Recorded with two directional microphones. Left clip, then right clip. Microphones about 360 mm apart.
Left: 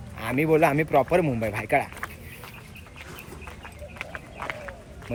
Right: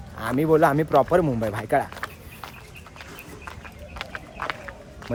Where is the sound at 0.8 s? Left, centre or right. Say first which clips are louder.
Right 2 dB; centre.